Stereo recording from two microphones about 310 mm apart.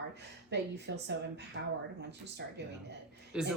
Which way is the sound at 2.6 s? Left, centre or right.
Right.